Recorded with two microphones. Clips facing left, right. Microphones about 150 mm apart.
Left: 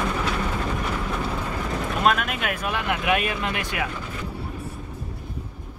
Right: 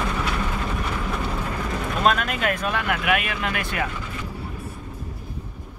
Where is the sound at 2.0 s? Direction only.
5° left (ahead or behind); by 3.6 s 30° left (ahead or behind).